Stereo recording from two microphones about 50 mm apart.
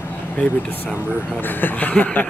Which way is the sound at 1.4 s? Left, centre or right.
Left.